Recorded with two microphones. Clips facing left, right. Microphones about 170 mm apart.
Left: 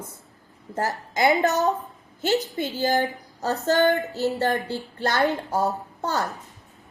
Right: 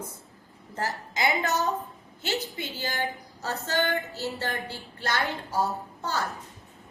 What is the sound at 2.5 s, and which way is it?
A woman's voice, 45° left (ahead or behind).